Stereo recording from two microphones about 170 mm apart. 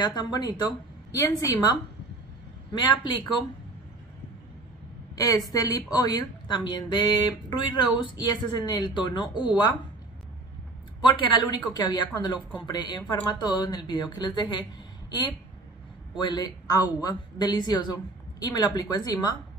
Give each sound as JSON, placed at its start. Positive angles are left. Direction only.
{"t": 0.0, "sound": "speech", "side_deg": 25}
{"t": 5.1, "sound": "speech", "side_deg": 20}
{"t": 11.0, "sound": "speech", "side_deg": 30}